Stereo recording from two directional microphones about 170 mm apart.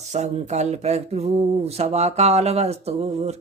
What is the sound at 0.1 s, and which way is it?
Speech, 40° right (ahead or behind).